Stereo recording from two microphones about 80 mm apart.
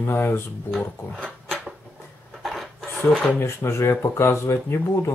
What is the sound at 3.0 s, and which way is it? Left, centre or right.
Speech, centre.